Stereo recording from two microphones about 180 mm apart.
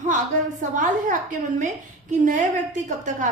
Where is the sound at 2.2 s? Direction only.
45° right (ahead or behind).